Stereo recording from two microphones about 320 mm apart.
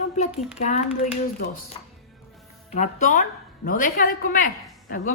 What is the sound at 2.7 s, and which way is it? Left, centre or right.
A woman's voice, left.